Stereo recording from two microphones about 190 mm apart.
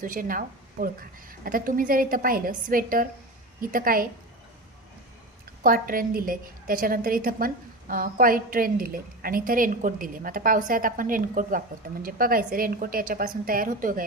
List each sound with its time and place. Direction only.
0.0 s a woman's voice: 45° right (ahead or behind)
5.6 s a woman's voice: 50° right (ahead or behind)